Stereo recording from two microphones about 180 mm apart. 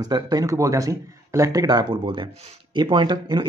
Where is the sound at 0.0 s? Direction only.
20° right (ahead or behind).